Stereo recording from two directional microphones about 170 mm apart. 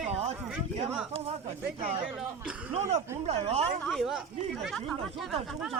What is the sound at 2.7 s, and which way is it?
Speech, 40° right (ahead or behind).